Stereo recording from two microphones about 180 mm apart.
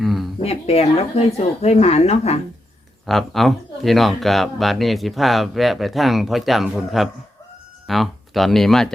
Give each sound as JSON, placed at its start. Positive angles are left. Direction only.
{"t": 0.0, "sound": "a sound", "side_deg": 0}
{"t": 0.4, "sound": "speech", "side_deg": 35}
{"t": 3.1, "sound": "speech", "side_deg": 0}